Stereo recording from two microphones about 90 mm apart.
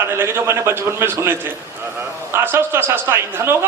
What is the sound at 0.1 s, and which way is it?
A man's voice, 25° right (ahead or behind).